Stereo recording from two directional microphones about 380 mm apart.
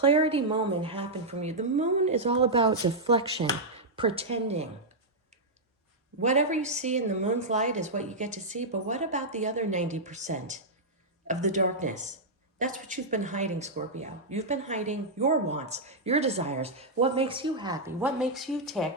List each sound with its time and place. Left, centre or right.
0.0 s speech: centre
6.2 s a woman's voice: centre